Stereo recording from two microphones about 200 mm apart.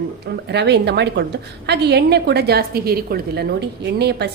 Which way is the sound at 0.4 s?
60° right (ahead or behind).